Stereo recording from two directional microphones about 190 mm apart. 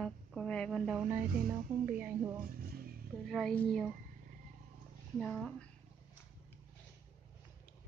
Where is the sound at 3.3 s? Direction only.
5° left (ahead or behind).